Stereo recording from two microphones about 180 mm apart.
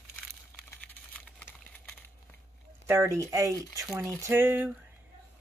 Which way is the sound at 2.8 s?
15° right (ahead or behind).